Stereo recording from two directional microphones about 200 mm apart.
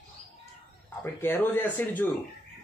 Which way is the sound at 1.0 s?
10° left (ahead or behind).